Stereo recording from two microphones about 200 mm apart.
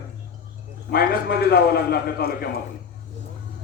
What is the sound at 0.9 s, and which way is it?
A man's voice, 50° left (ahead or behind).